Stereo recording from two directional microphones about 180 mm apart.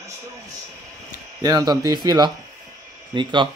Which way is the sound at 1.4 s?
20° right (ahead or behind).